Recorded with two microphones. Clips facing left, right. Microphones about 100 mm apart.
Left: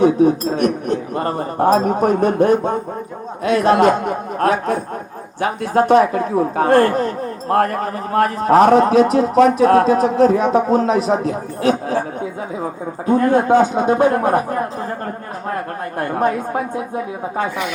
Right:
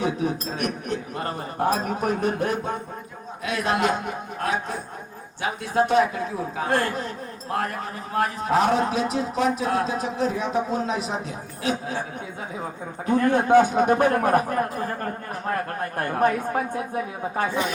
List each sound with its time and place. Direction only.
0.0 s a man's voice: 40° left (ahead or behind)
13.1 s speech: 35° left (ahead or behind)
13.6 s a woman's voice: 20° left (ahead or behind)
16.0 s a woman's voice: 25° left (ahead or behind)